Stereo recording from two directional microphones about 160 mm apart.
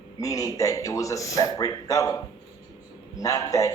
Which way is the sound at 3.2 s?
20° left (ahead or behind).